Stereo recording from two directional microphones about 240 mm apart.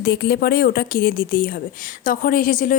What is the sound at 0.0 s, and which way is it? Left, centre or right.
Speech, left.